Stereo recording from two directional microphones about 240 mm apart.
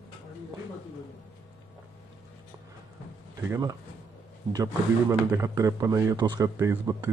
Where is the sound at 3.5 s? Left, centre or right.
Centre.